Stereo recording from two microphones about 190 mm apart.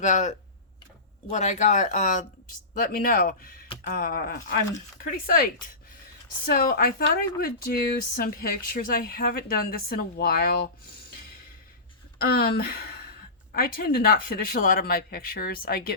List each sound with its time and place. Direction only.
0.0 s speech: 40° left (ahead or behind)
12.2 s speech: 55° left (ahead or behind)